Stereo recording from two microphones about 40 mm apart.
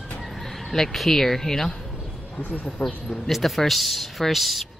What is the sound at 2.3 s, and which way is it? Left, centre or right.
Speech, left.